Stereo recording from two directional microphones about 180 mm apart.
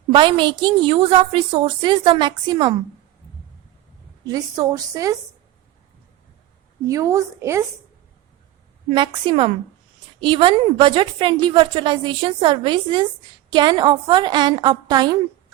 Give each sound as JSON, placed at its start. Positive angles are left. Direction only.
{"t": 0.1, "sound": "a woman's voice", "side_deg": -25}
{"t": 4.3, "sound": "a woman's voice", "side_deg": -20}
{"t": 6.8, "sound": "a woman's voice", "side_deg": -15}
{"t": 8.9, "sound": "a woman's voice", "side_deg": -25}